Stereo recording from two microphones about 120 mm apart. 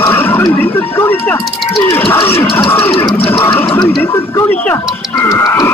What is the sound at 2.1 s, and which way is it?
Music, 20° left (ahead or behind).